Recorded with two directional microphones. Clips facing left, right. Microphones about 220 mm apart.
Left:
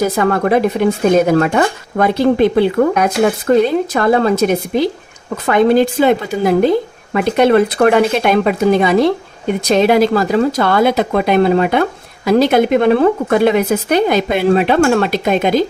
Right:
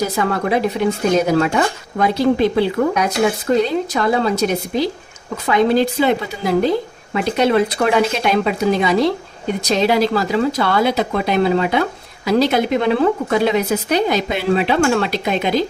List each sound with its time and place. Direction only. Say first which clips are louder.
0.2 s speech: left 4 dB; 50° left (ahead or behind)